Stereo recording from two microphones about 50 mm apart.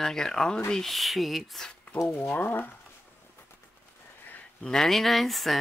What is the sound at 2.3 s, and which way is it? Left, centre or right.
Speech, left.